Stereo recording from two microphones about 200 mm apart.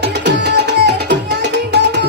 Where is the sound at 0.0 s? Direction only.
60° right (ahead or behind).